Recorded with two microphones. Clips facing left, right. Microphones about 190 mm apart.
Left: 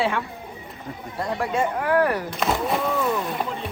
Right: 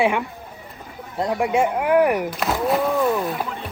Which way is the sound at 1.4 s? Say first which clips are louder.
Right 4 dB; 15° right (ahead or behind).